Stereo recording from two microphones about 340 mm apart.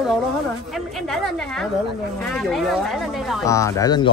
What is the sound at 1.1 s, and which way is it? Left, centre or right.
Speech, centre.